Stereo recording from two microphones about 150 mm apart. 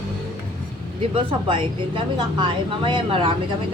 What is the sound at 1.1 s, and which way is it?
A woman's voice, 35° right (ahead or behind).